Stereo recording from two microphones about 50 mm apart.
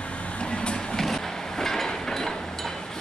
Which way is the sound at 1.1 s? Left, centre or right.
Centre.